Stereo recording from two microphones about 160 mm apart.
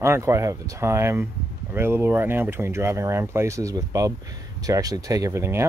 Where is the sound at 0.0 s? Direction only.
15° right (ahead or behind).